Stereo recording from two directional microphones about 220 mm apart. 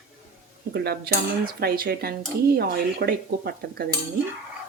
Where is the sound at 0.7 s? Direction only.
45° right (ahead or behind).